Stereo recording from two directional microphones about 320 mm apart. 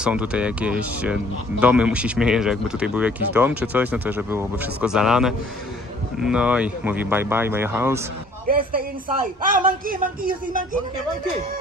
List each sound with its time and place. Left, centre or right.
0.0 s speech: centre
8.5 s speech: right